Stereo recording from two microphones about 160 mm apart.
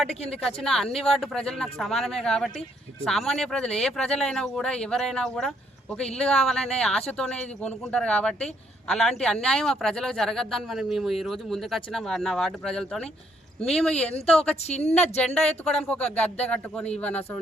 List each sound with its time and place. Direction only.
0.3 s speech: 5° left (ahead or behind)
14.6 s speech: 40° left (ahead or behind)
15.4 s speech: 5° left (ahead or behind)